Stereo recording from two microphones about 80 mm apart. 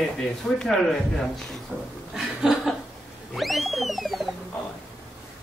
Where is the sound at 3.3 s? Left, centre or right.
Centre.